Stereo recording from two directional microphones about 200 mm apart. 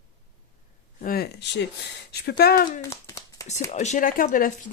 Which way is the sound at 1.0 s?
50° left (ahead or behind).